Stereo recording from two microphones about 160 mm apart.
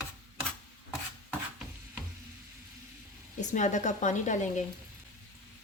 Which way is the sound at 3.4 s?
50° left (ahead or behind).